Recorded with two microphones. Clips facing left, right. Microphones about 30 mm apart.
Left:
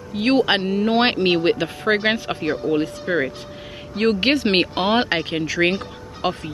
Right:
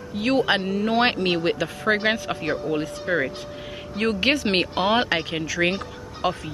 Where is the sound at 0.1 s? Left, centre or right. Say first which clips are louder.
Left 3 dB; left.